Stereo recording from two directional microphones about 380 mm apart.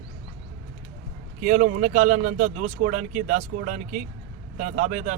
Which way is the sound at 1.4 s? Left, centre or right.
Centre.